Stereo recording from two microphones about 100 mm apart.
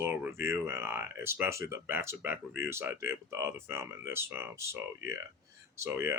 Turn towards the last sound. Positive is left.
turn(degrees=-25)  # may be behind; listen again after turning